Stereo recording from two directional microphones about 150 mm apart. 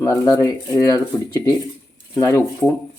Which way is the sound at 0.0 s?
20° left (ahead or behind).